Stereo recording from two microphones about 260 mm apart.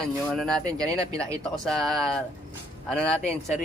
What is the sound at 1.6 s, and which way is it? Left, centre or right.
Speech, centre.